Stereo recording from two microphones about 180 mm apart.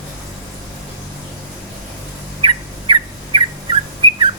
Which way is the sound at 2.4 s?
30° right (ahead or behind).